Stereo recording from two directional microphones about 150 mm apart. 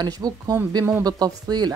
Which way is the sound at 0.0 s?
25° right (ahead or behind).